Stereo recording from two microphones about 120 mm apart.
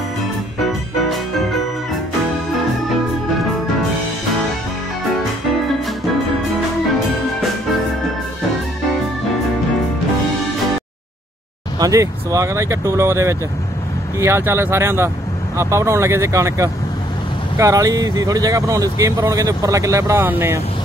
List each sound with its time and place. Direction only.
11.8 s speech: 25° right (ahead or behind)